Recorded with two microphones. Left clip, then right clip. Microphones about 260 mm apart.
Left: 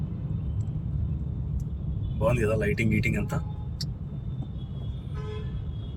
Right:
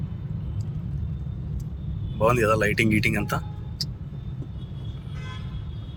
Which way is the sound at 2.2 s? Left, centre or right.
Centre.